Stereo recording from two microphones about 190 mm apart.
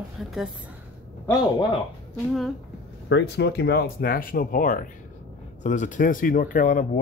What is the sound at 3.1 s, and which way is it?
A man's voice, 65° left (ahead or behind).